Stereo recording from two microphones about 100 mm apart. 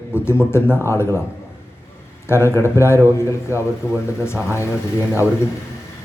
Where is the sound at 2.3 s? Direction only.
25° left (ahead or behind).